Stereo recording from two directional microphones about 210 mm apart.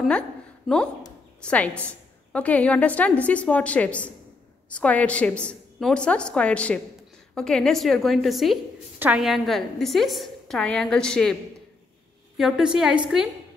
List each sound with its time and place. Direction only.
1.4 s a woman's voice: 5° left (ahead or behind)
12.4 s a woman's voice: centre (ahead or behind)